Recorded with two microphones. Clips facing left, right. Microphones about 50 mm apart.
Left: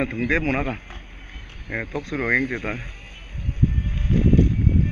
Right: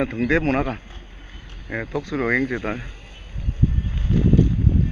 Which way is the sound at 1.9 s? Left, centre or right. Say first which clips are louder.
Right 1 dB; centre.